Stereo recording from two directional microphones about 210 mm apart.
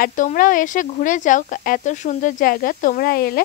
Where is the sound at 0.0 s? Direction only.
40° left (ahead or behind).